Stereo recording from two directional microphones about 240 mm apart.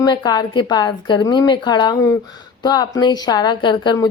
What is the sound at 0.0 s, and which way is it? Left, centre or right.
A woman's voice, centre.